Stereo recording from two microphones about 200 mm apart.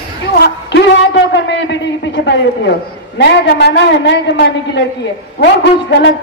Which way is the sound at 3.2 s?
60° left (ahead or behind).